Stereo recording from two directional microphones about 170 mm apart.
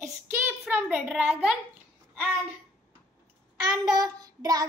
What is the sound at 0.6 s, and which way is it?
Speech, 10° right (ahead or behind).